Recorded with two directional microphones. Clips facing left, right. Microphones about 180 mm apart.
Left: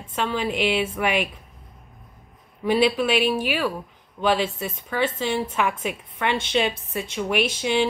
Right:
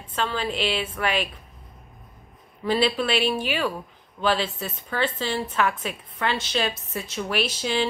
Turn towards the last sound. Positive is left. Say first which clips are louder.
# left 3 dB
turn(degrees=15)  # may be behind; listen again after turning